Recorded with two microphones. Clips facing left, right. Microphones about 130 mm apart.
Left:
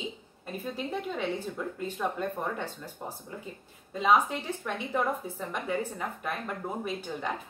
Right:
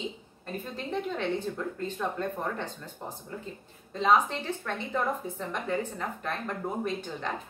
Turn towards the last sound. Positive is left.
turn(degrees=10)  # may be behind; listen again after turning